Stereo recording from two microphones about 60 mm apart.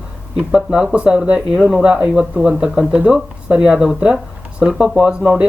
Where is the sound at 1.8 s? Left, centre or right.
Centre.